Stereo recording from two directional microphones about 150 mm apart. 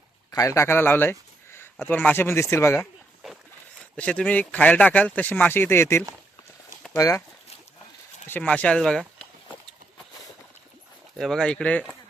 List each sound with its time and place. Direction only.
0.3 s speech: 20° left (ahead or behind)
3.9 s speech: 10° left (ahead or behind)
8.3 s speech: 10° left (ahead or behind)
11.2 s speech: 5° left (ahead or behind)